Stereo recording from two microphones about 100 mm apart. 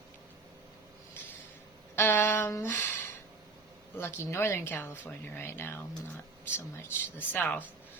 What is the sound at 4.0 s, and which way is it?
Speech, 25° left (ahead or behind).